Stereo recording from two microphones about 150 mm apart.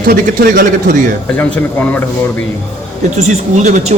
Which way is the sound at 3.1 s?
50° right (ahead or behind).